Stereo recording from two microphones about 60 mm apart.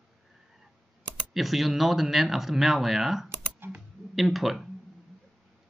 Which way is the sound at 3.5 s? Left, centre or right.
Right.